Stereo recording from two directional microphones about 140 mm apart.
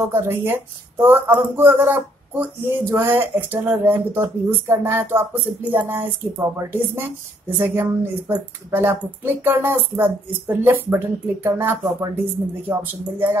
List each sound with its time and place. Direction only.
0.1 s speech: 15° right (ahead or behind)